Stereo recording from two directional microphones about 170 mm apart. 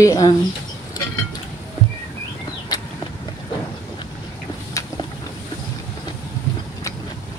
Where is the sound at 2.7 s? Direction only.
25° left (ahead or behind).